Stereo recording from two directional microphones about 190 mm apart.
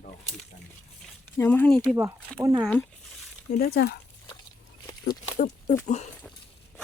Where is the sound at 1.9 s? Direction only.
15° right (ahead or behind).